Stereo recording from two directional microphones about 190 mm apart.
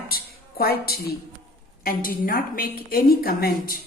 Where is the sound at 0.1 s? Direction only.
55° left (ahead or behind).